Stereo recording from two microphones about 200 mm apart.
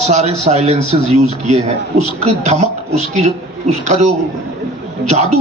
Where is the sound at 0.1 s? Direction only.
35° right (ahead or behind).